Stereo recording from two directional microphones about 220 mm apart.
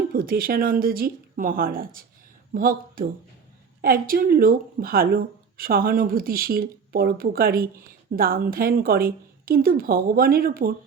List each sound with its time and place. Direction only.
0.1 s speech: 40° right (ahead or behind)